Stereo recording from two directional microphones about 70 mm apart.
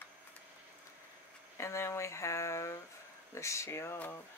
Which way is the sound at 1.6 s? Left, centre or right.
Left.